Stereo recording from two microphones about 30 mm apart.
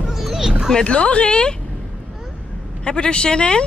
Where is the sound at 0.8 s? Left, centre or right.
Left.